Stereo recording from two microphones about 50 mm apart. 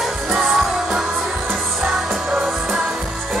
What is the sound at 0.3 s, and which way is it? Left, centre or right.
Music, centre.